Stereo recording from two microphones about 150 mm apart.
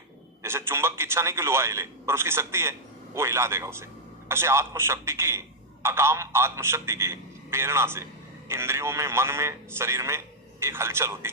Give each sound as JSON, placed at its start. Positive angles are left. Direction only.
{"t": 0.4, "sound": "a man's voice", "side_deg": -15}